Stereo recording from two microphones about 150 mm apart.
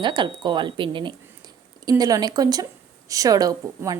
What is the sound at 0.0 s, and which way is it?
A woman's voice, 30° right (ahead or behind).